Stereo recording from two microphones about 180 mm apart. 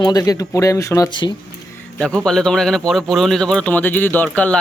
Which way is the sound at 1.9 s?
5° left (ahead or behind).